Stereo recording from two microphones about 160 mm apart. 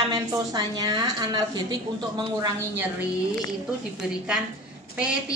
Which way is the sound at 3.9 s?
5° right (ahead or behind).